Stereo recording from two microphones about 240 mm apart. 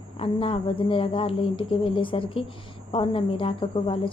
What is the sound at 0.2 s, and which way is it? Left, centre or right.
Speech, left.